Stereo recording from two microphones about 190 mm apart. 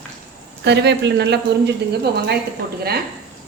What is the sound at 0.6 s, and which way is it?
Speech, 60° right (ahead or behind).